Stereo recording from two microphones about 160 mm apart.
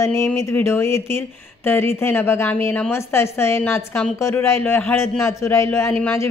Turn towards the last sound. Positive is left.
turn(degrees=15)  # may be behind; listen again after turning